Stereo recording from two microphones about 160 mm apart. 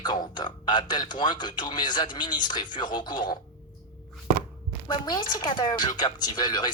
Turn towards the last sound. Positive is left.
turn(degrees=25)  # may be behind; listen again after turning